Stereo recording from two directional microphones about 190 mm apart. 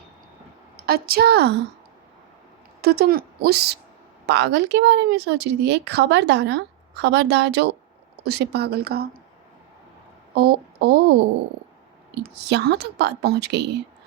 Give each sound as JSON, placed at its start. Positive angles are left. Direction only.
{"t": 0.9, "sound": "speech", "side_deg": -55}
{"t": 2.8, "sound": "speech", "side_deg": -55}
{"t": 10.3, "sound": "speech", "side_deg": -55}
{"t": 12.1, "sound": "speech", "side_deg": -65}